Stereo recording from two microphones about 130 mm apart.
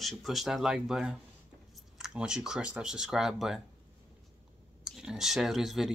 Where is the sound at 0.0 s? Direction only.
Centre (ahead or behind).